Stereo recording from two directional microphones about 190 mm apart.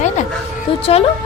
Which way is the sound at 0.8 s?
30° left (ahead or behind).